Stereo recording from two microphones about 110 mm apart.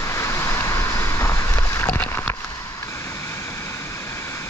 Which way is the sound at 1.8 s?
20° left (ahead or behind).